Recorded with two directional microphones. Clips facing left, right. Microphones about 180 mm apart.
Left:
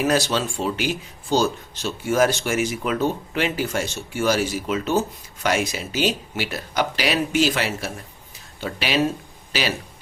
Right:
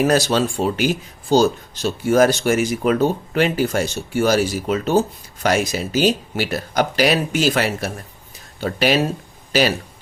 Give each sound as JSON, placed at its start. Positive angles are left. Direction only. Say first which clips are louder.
{"t": 0.1, "sound": "speech", "louder": "right 4 dB", "side_deg": -40}